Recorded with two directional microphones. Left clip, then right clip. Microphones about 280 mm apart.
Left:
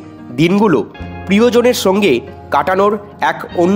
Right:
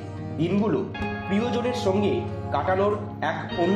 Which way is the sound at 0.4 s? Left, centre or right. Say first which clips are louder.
Left 13 dB; left.